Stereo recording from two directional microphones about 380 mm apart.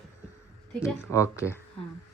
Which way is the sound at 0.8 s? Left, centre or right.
Centre.